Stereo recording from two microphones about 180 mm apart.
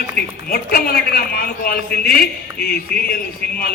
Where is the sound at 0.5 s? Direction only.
55° left (ahead or behind).